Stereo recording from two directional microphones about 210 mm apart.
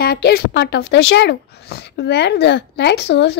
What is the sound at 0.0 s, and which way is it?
Speech, 45° left (ahead or behind).